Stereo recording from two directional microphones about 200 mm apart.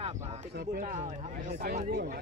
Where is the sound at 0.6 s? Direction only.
45° right (ahead or behind).